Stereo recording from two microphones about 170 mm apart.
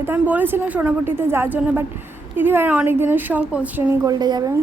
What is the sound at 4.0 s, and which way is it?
Speech, 25° right (ahead or behind).